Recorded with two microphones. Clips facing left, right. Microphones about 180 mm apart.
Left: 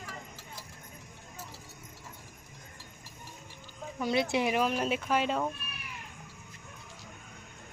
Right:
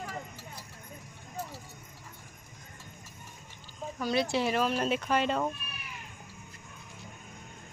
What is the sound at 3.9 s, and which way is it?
Speech, 20° left (ahead or behind).